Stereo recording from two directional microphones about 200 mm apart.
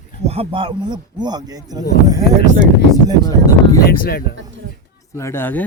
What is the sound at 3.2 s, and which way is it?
Speech, 15° left (ahead or behind).